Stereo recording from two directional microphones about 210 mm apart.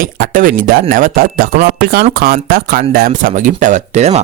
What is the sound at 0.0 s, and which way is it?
Speech, 40° right (ahead or behind).